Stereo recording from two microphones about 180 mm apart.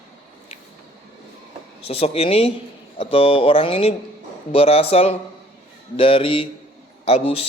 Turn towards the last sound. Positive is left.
turn(degrees=35)  # may be behind; listen again after turning